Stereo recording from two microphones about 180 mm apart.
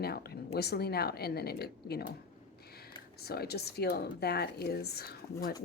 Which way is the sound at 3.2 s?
60° left (ahead or behind).